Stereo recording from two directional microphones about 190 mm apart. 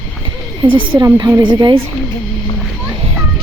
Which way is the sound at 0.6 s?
20° right (ahead or behind).